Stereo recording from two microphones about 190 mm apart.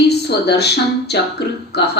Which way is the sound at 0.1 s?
60° left (ahead or behind).